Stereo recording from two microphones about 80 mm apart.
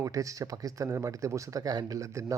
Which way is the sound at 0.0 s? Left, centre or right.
Right.